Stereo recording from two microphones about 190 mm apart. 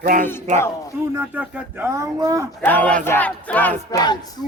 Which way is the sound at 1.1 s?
10° right (ahead or behind).